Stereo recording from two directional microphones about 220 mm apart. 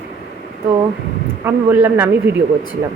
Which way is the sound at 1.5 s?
10° right (ahead or behind).